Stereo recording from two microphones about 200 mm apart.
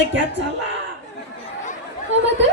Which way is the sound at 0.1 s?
65° right (ahead or behind).